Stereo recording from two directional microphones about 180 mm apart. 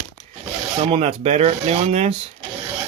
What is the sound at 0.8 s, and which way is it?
Speech, 35° right (ahead or behind).